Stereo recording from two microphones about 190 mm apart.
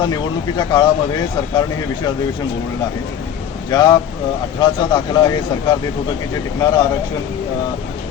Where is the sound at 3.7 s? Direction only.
20° left (ahead or behind).